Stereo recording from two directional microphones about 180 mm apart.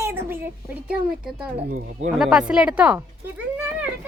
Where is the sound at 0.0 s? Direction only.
10° right (ahead or behind).